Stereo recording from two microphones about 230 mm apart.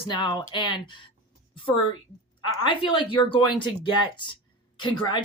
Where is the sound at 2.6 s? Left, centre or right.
Left.